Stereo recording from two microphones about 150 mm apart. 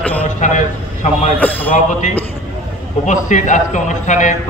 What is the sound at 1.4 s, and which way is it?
Speech, 10° left (ahead or behind).